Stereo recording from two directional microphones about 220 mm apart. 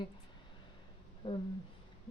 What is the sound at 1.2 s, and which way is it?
Speech, 20° left (ahead or behind).